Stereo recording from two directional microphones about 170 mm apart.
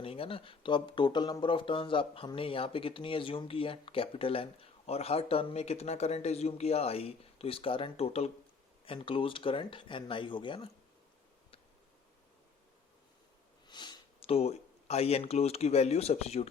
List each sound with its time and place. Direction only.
0.0 s speech: 35° left (ahead or behind)
13.7 s speech: 25° left (ahead or behind)